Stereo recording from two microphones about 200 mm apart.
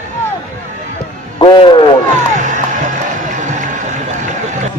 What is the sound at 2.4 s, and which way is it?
Music, 40° right (ahead or behind).